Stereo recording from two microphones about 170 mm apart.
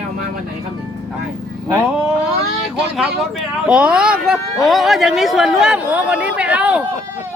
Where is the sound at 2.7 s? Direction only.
5° right (ahead or behind).